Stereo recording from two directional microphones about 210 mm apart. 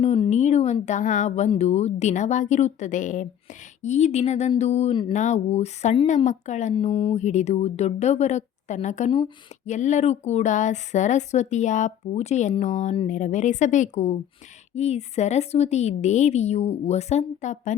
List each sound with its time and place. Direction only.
0.0 s speech: 30° left (ahead or behind)